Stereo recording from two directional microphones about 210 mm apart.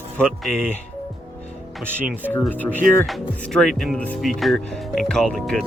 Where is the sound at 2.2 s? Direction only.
10° left (ahead or behind).